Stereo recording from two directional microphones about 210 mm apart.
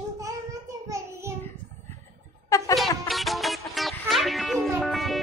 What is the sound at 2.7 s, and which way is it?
Music, centre (ahead or behind).